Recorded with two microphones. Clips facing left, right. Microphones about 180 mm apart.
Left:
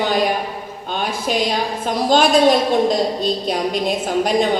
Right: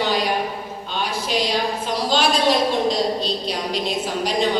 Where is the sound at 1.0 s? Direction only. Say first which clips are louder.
Left 3 dB; 50° left (ahead or behind).